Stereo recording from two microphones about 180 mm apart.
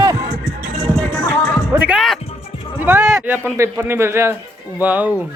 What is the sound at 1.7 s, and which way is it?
Speech, 10° right (ahead or behind).